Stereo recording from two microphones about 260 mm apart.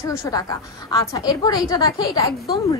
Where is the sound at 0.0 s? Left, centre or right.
Centre.